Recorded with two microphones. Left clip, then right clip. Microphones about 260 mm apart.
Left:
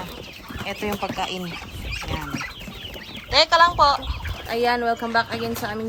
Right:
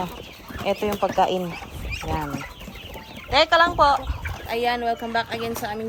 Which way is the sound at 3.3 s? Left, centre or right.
Centre.